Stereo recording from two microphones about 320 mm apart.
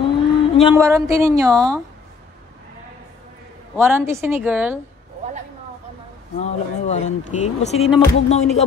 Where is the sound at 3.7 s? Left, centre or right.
Centre.